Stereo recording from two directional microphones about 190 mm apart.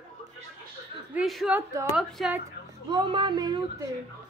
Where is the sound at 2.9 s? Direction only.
25° right (ahead or behind).